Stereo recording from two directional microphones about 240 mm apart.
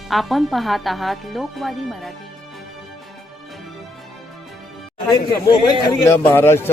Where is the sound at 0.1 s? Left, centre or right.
Centre.